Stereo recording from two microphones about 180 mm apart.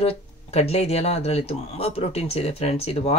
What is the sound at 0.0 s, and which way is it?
Speech, 35° left (ahead or behind).